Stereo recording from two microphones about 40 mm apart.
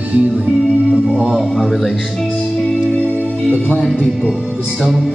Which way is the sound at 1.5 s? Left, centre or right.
Centre.